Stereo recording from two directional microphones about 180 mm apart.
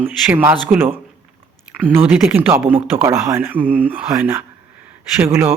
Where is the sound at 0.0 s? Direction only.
10° right (ahead or behind).